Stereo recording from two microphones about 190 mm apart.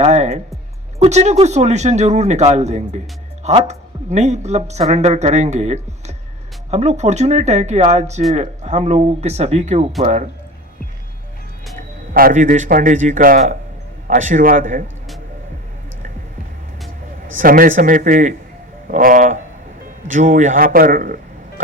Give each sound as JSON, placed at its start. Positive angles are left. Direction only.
{"t": 0.0, "sound": "speech", "side_deg": -35}
{"t": 12.1, "sound": "speech", "side_deg": -45}
{"t": 17.3, "sound": "speech", "side_deg": -50}